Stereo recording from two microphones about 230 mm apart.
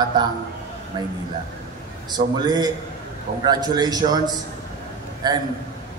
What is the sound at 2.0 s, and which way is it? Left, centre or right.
A man's voice, centre.